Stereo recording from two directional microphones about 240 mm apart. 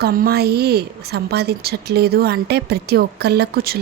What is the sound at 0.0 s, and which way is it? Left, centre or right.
A woman's voice, right.